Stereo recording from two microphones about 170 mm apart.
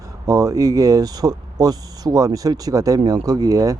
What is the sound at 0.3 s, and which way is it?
Speech, 20° right (ahead or behind).